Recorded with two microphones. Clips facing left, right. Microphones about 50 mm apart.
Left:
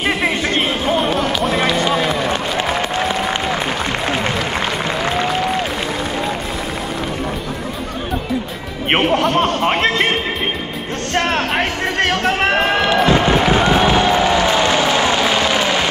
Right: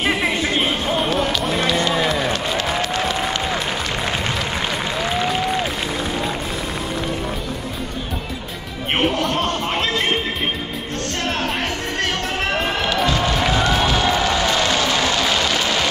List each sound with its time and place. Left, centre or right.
0.0 s music: centre
1.9 s run: centre
2.8 s applause: left
8.9 s music: left
11.1 s music: left
14.0 s a sound: left